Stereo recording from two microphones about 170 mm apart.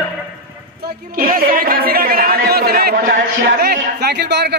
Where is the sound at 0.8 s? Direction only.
55° right (ahead or behind).